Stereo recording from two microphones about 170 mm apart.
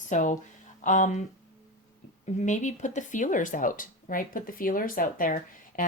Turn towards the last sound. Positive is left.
turn(degrees=55)  # may be behind; listen again after turning